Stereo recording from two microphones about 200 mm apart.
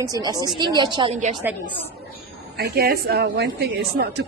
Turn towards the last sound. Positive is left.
turn(degrees=-55)  # may be behind; listen again after turning